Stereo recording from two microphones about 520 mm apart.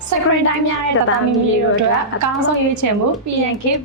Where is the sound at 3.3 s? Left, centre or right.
Right.